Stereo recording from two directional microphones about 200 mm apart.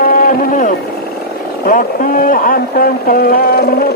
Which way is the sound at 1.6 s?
45° left (ahead or behind).